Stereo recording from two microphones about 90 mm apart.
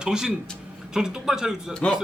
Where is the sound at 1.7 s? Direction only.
5° left (ahead or behind).